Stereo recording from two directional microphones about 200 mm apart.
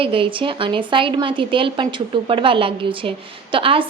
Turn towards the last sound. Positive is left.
turn(degrees=-25)  # may be behind; listen again after turning